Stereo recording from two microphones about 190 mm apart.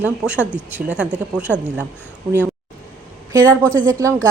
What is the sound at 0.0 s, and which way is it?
A woman's voice, 5° right (ahead or behind).